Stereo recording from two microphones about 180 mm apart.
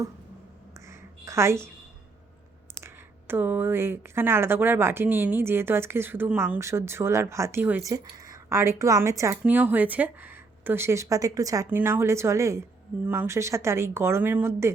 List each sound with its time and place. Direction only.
0.9 s a sound: 15° right (ahead or behind)
2.8 s speech: 10° right (ahead or behind)
7.9 s a woman's voice: 20° right (ahead or behind)